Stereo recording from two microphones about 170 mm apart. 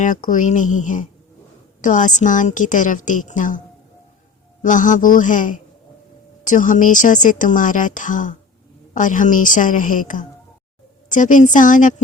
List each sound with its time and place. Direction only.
0.0 s speech: 50° left (ahead or behind)
4.6 s speech: 50° left (ahead or behind)